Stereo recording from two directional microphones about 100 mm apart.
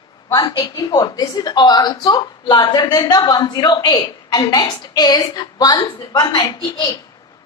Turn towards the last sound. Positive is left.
turn(degrees=45)  # may be behind; listen again after turning